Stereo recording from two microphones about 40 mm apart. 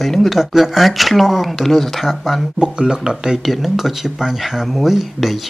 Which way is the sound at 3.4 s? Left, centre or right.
Centre.